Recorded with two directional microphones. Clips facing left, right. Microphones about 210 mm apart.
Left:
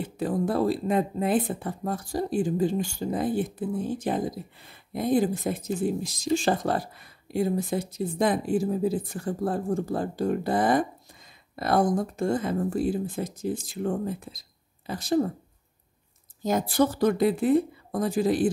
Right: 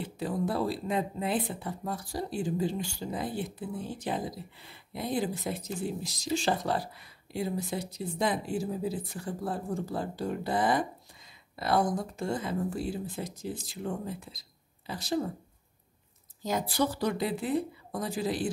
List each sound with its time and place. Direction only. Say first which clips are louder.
0.0 s speech: left 5 dB; 50° left (ahead or behind)
16.4 s speech: left 6 dB; 50° left (ahead or behind)